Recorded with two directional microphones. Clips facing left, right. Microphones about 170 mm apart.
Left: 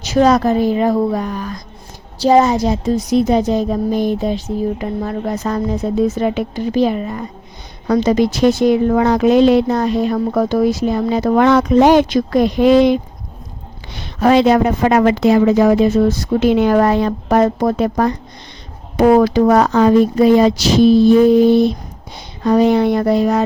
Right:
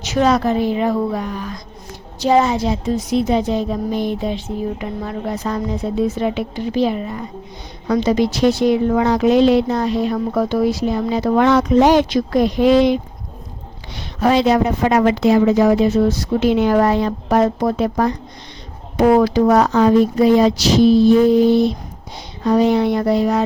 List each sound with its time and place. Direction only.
0.0 s a woman's voice: 35° left (ahead or behind)